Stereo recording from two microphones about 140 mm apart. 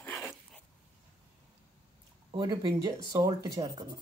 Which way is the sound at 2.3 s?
30° right (ahead or behind).